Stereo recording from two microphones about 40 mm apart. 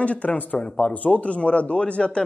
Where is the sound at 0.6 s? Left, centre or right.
Left.